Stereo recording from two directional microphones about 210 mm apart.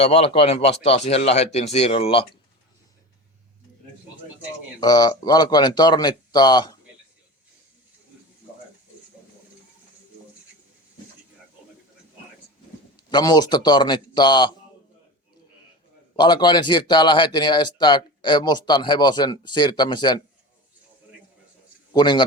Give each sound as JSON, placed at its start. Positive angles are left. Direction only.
{"t": 0.0, "sound": "speech", "side_deg": 30}
{"t": 4.8, "sound": "speech", "side_deg": 20}
{"t": 13.1, "sound": "speech", "side_deg": 20}
{"t": 16.1, "sound": "speech", "side_deg": 20}
{"t": 21.9, "sound": "speech", "side_deg": 20}